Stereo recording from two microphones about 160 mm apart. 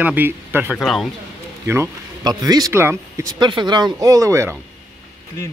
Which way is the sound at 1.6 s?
15° right (ahead or behind).